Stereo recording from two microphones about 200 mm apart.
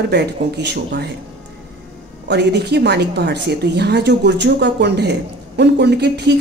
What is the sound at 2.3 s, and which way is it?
A woman's voice, 60° right (ahead or behind).